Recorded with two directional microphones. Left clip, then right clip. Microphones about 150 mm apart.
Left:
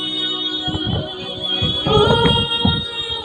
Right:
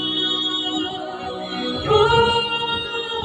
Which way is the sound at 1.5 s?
45° left (ahead or behind).